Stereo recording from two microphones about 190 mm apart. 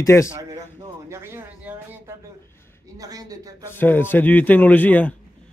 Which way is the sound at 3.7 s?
10° left (ahead or behind).